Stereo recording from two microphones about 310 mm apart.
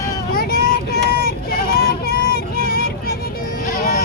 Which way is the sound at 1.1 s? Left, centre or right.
Left.